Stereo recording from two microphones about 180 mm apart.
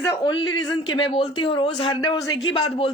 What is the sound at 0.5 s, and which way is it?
Speech, 25° left (ahead or behind).